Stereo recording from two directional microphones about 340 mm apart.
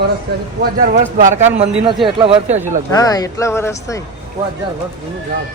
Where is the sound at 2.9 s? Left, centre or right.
Centre.